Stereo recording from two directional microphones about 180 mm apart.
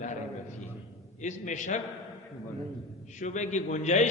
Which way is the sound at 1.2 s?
40° left (ahead or behind).